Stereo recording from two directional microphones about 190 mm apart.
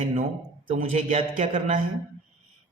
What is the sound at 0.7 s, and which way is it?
Speech, 40° right (ahead or behind).